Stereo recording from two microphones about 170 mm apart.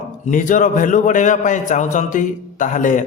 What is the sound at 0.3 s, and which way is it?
A man's voice, 50° left (ahead or behind).